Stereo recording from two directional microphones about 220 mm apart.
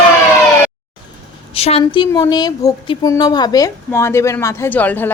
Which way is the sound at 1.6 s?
25° left (ahead or behind).